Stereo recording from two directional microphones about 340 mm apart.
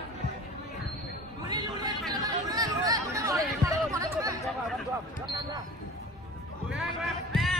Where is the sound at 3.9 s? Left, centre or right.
Centre.